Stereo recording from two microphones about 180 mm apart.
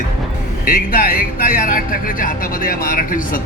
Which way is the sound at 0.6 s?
50° left (ahead or behind).